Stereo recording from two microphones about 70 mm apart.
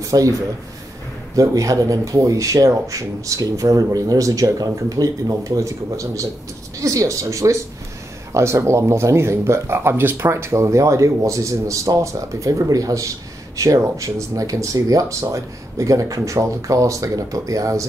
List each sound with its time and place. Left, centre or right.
0.0 s a man's voice: right